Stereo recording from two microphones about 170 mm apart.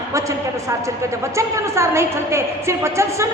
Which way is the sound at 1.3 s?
15° right (ahead or behind).